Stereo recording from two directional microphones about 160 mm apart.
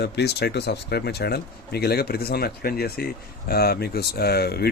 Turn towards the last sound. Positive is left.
turn(degrees=80)